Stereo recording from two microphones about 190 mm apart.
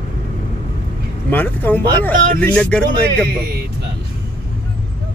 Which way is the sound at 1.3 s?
10° left (ahead or behind).